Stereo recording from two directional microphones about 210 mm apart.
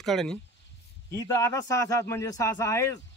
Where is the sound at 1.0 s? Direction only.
15° left (ahead or behind).